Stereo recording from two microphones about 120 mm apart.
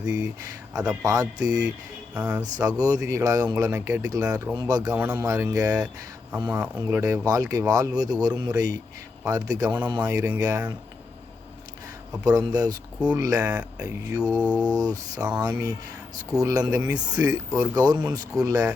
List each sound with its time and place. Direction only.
0.0 s speech: 30° right (ahead or behind)
2.1 s speech: 10° right (ahead or behind)
2.4 s speech: 30° right (ahead or behind)
12.2 s speech: 30° right (ahead or behind)
14.3 s mantra: 15° left (ahead or behind)
14.6 s speech: 30° right (ahead or behind)
16.4 s speech: 30° right (ahead or behind)